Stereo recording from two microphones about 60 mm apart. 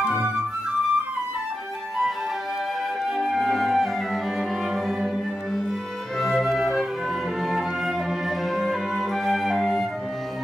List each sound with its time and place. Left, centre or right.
0.0 s music: right
3.2 s cello: centre
6.1 s music: centre